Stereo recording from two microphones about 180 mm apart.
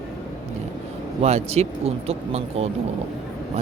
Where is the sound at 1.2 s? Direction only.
35° right (ahead or behind).